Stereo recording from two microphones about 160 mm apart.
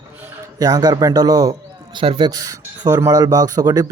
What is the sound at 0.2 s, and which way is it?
Speech, 25° right (ahead or behind).